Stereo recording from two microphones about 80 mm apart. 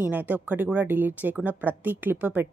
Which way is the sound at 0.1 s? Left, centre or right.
Right.